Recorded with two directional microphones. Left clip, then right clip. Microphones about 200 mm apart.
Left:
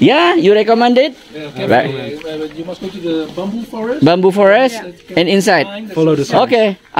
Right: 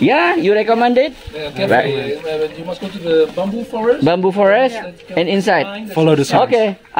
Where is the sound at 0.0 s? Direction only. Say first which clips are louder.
Left 3 dB; 45° left (ahead or behind).